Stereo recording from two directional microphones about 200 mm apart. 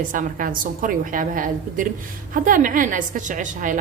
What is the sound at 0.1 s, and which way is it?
A woman's voice, 40° right (ahead or behind).